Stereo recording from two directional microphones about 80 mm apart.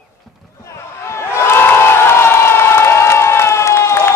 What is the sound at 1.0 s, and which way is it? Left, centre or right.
Crowd, left.